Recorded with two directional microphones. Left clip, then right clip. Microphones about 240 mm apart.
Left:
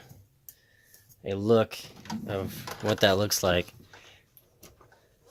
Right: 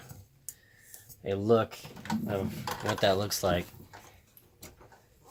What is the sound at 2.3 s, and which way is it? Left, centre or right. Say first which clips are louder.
Speech: left 2 dB; left.